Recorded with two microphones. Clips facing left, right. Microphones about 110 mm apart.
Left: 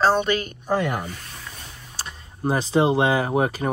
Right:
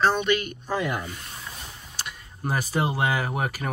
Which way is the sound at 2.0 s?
30° left (ahead or behind).